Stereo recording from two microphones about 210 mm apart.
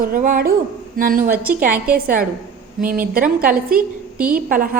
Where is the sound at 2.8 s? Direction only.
40° right (ahead or behind).